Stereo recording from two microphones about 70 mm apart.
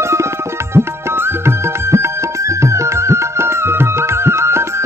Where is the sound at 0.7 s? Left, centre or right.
Right.